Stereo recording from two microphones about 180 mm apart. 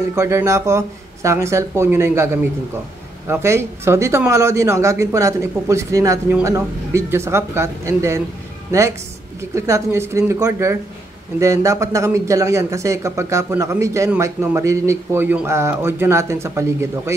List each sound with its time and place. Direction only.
0.1 s speech: 15° right (ahead or behind)
9.6 s speech: 15° right (ahead or behind)